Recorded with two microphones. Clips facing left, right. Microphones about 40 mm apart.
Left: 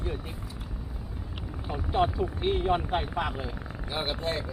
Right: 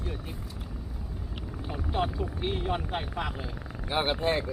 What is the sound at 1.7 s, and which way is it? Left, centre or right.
Speech, centre.